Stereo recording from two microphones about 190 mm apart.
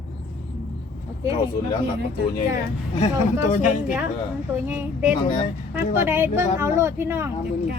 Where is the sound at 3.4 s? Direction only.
40° left (ahead or behind).